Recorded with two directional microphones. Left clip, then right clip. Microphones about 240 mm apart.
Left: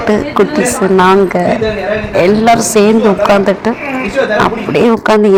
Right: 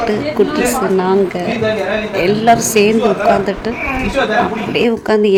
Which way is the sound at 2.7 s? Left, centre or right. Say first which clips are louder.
Left 3 dB; left.